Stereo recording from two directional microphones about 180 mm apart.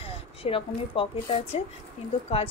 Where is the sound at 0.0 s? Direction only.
30° left (ahead or behind).